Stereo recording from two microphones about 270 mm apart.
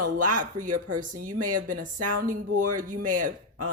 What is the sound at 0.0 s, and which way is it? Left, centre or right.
Speech, right.